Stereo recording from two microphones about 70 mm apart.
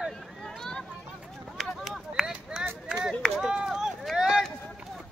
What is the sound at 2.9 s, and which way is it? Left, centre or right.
Run, centre.